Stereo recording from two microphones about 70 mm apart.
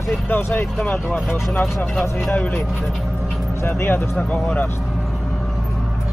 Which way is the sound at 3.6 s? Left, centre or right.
Left.